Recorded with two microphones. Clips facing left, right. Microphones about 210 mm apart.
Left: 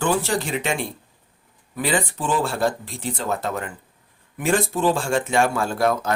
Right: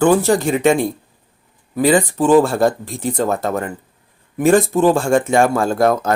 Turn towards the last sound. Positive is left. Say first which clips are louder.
# right 6 dB
turn(degrees=-45)  # may be behind; listen again after turning